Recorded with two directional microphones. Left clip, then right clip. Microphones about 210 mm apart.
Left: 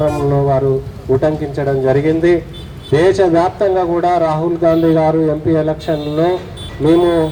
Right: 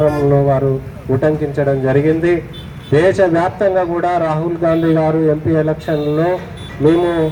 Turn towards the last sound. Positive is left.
turn(degrees=-35)  # may be behind; listen again after turning